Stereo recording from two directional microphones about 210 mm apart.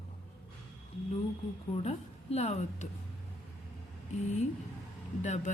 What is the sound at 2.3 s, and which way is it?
Speech, 30° left (ahead or behind).